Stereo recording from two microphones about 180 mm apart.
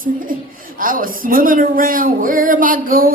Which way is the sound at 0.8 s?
50° right (ahead or behind).